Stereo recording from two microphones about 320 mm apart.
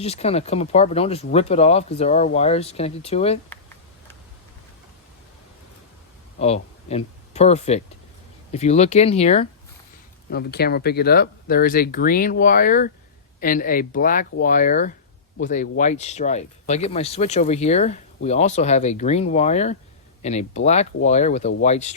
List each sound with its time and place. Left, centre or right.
0.0 s speech: centre
6.4 s speech: centre
10.2 s speech: left